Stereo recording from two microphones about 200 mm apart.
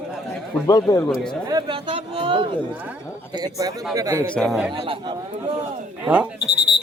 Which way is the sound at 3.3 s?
20° right (ahead or behind).